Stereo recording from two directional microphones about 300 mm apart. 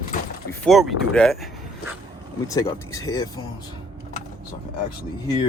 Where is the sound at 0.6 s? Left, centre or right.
Centre.